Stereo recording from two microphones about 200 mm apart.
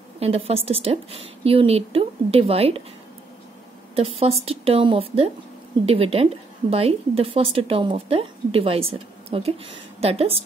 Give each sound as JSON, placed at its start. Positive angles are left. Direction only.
{"t": 0.2, "sound": "speech", "side_deg": -30}
{"t": 3.9, "sound": "speech", "side_deg": -30}